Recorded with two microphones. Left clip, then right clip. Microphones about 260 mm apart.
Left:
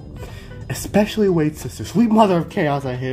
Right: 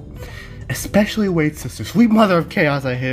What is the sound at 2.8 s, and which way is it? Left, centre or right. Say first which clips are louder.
Speech: right 4 dB; right.